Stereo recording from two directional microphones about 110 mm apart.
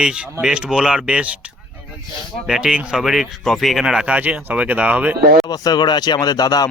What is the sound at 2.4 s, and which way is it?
Speech, 5° right (ahead or behind).